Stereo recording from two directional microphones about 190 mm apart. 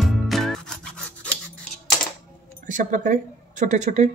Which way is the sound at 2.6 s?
40° right (ahead or behind).